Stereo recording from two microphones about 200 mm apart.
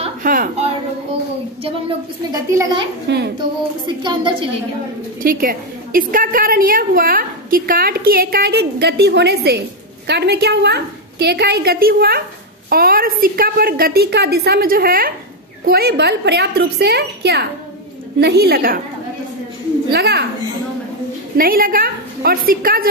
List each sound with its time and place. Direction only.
0.2 s a sound: 40° right (ahead or behind)
3.3 s speech: 25° right (ahead or behind)
5.2 s a woman's voice: 45° right (ahead or behind)
19.9 s a woman's voice: 55° right (ahead or behind)
21.4 s a woman's voice: 45° right (ahead or behind)